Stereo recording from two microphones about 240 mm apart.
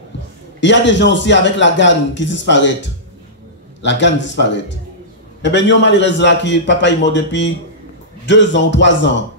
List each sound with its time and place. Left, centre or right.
0.6 s a man's voice: left